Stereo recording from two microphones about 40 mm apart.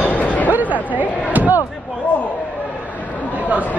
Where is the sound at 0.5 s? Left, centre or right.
Right.